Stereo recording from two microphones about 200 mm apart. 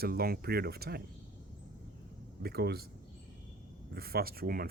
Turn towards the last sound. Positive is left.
turn(degrees=-50)  # may be behind; listen again after turning